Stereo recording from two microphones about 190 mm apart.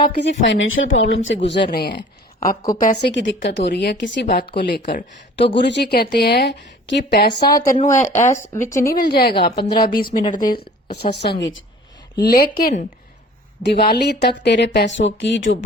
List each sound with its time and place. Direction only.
0.2 s speech: 70° left (ahead or behind)
3.0 s speech: 65° left (ahead or behind)
5.5 s speech: 65° left (ahead or behind)
7.3 s speech: 20° left (ahead or behind)
8.5 s a woman's voice: 40° left (ahead or behind)
8.9 s speech: 55° left (ahead or behind)
9.9 s speech: 25° left (ahead or behind)
10.5 s speech: 55° left (ahead or behind); by 11.6 s 70° left (ahead or behind)
12.1 s a woman's voice: 55° left (ahead or behind)
13.6 s speech: 60° left (ahead or behind); by 15.5 s 75° left (ahead or behind)